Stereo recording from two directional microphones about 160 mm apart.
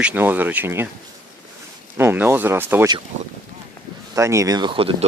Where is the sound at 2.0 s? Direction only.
15° right (ahead or behind).